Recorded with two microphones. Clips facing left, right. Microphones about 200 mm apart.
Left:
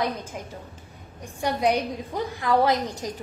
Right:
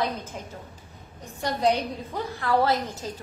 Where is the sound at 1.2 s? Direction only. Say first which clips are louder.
Even; 10° left (ahead or behind).